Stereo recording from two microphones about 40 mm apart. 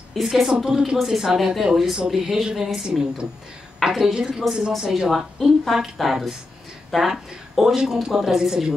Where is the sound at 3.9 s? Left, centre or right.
Centre.